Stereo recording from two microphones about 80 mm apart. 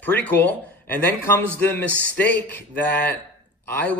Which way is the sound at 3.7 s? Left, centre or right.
Centre.